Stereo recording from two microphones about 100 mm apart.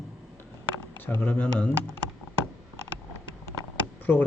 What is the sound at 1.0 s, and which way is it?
Speech, 20° left (ahead or behind).